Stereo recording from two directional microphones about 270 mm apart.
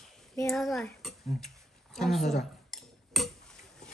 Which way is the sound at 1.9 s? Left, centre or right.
Centre.